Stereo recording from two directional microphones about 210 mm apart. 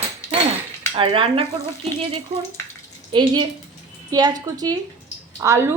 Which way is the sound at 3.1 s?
20° right (ahead or behind).